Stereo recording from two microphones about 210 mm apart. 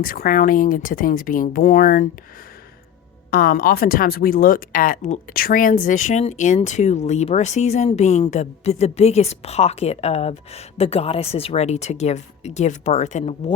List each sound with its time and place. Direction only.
0.0 s speech: 45° left (ahead or behind)
3.3 s speech: 45° left (ahead or behind)